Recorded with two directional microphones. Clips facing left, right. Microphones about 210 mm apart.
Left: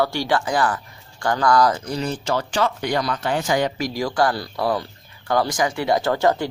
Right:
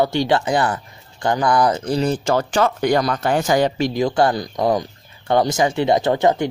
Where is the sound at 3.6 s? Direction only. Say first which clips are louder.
Right 5 dB; 25° right (ahead or behind).